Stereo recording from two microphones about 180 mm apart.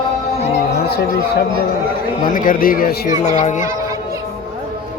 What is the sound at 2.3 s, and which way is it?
Speech, 50° left (ahead or behind).